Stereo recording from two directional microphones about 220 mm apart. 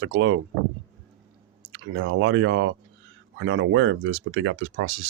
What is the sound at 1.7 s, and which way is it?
Speech, 60° right (ahead or behind).